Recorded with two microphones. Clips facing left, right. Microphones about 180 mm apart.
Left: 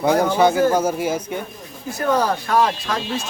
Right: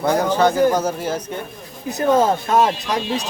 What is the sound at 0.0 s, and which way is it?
Speech, 10° left (ahead or behind).